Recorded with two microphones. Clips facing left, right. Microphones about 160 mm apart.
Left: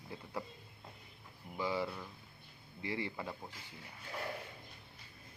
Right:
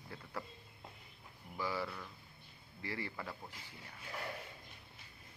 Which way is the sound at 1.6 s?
20° left (ahead or behind).